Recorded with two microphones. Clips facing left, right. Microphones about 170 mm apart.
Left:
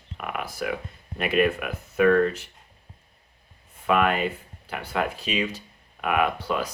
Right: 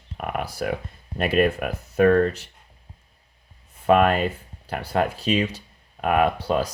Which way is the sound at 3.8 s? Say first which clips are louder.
Right 4 dB; 35° right (ahead or behind).